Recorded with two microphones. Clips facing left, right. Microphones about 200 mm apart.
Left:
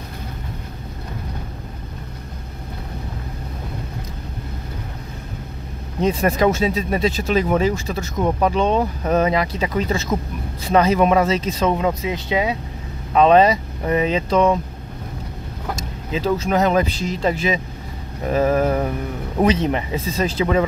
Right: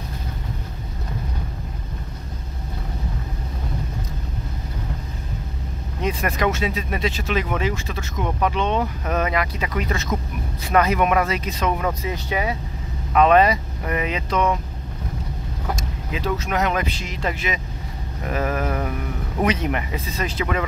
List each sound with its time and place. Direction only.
6.0 s speech: 30° left (ahead or behind)
13.1 s speech: 30° left (ahead or behind)
16.1 s speech: 30° left (ahead or behind)